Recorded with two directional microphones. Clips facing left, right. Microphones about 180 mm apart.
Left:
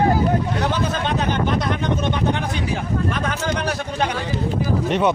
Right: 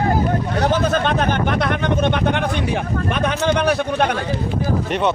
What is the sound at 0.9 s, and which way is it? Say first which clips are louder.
Speech: right 3 dB; 60° right (ahead or behind).